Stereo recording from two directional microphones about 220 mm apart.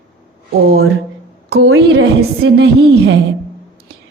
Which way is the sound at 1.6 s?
70° right (ahead or behind).